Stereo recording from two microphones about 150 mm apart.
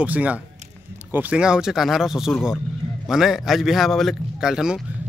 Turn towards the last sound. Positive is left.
turn(degrees=-5)  # may be behind; listen again after turning